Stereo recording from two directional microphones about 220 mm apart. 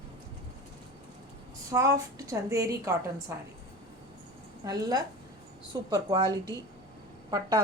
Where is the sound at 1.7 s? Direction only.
15° right (ahead or behind).